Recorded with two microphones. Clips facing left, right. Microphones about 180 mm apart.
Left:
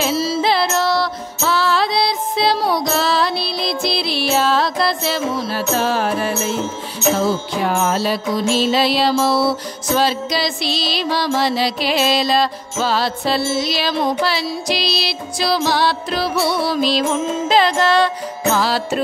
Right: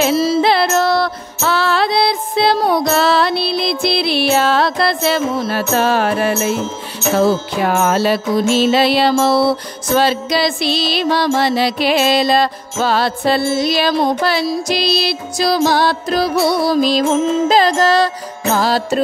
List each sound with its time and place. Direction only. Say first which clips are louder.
0.0 s music: right 5 dB; 50° right (ahead or behind)